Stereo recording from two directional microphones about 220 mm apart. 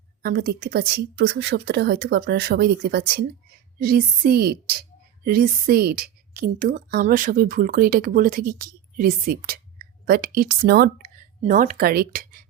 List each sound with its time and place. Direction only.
0.2 s speech: 40° right (ahead or behind)